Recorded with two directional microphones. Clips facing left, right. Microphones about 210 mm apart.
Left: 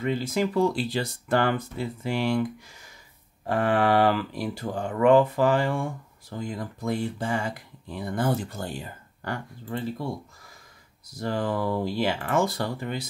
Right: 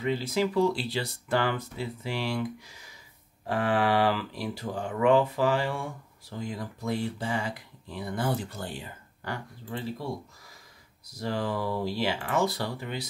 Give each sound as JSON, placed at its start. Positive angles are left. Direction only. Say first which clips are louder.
{"t": 0.0, "sound": "speech", "louder": "left 1 dB", "side_deg": 50}
{"t": 11.1, "sound": "speech", "louder": "left 3 dB", "side_deg": 50}